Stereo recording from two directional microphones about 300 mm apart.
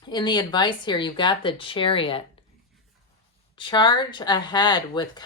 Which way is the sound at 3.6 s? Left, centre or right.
Centre.